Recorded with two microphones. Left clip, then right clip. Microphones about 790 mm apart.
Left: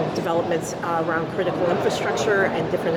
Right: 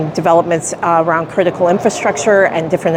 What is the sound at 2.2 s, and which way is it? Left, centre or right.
Speech, right.